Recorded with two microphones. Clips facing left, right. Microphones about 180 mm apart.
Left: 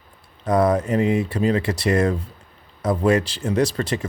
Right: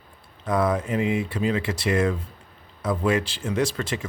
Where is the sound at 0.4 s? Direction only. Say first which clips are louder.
Left 5 dB; 40° left (ahead or behind).